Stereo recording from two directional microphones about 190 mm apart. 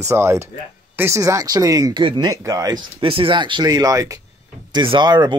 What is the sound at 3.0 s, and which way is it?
Speech, 30° right (ahead or behind).